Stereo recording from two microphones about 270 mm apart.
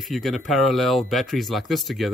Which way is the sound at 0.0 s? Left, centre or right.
Centre.